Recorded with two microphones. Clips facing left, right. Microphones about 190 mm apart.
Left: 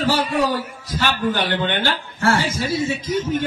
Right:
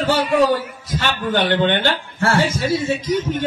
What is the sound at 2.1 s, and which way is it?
Speech, 30° right (ahead or behind).